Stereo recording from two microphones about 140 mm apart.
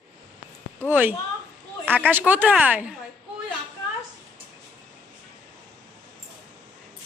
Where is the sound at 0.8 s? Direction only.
15° right (ahead or behind).